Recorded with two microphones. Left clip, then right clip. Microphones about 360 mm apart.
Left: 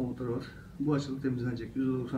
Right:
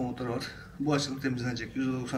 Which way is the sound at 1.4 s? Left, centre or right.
Right.